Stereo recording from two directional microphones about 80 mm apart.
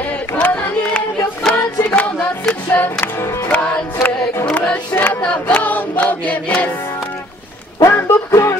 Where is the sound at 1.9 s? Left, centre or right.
Centre.